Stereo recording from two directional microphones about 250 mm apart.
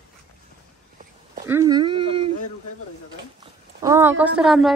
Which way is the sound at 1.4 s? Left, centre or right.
Centre.